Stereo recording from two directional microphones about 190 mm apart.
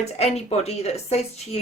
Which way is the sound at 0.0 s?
35° left (ahead or behind).